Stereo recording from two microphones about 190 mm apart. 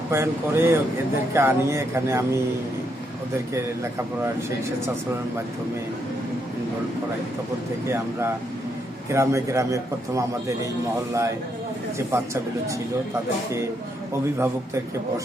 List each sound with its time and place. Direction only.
0.1 s a man's voice: 15° right (ahead or behind)
7.9 s a man's voice: 15° right (ahead or behind)
11.9 s a man's voice: 15° right (ahead or behind)
14.1 s a man's voice: 15° right (ahead or behind)